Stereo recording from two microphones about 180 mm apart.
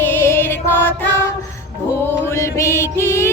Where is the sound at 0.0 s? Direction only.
15° left (ahead or behind).